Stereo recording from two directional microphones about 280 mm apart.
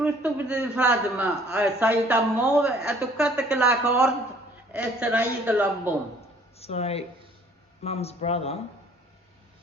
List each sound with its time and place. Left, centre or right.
0.0 s a man's voice: centre
6.6 s speech: left